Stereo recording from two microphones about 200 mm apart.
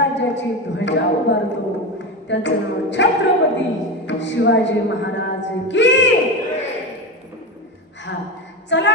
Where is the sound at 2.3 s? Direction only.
60° left (ahead or behind).